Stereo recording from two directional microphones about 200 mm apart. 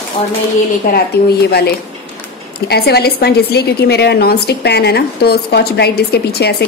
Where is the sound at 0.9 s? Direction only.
50° left (ahead or behind).